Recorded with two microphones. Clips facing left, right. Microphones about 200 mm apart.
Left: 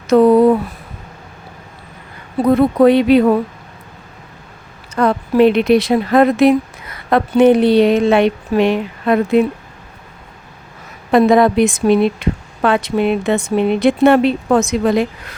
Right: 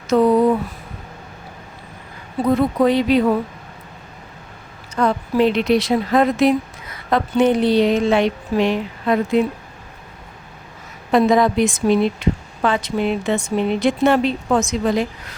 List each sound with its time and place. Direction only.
0.1 s a woman's voice: 60° left (ahead or behind)
2.8 s a woman's voice: 60° left (ahead or behind)
4.9 s a woman's voice: 60° left (ahead or behind)
11.1 s a woman's voice: 60° left (ahead or behind)